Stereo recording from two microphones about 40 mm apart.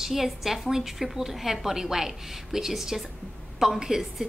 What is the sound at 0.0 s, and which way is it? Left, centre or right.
A woman's voice, centre.